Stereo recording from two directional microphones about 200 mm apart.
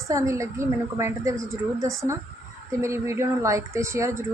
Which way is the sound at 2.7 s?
15° right (ahead or behind).